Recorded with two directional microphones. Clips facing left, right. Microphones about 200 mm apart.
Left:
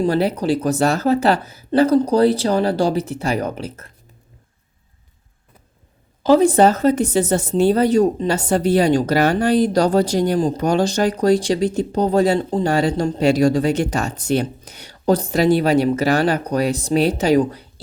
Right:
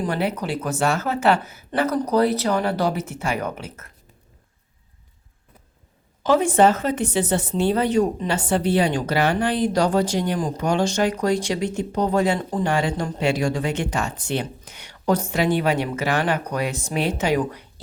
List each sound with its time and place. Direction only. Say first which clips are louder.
0.0 s speech: left 6 dB; 35° left (ahead or behind)
6.2 s speech: left 4 dB; 35° left (ahead or behind)